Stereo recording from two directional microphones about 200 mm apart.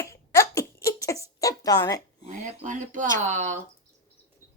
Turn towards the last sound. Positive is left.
turn(degrees=-35)  # may be behind; listen again after turning